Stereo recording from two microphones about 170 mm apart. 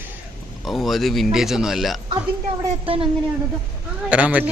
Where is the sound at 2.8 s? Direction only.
35° right (ahead or behind).